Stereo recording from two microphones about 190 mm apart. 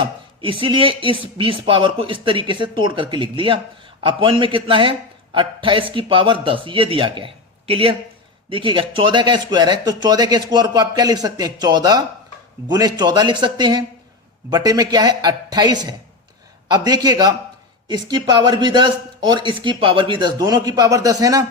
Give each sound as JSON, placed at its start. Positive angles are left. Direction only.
{"t": 0.0, "sound": "speech", "side_deg": -25}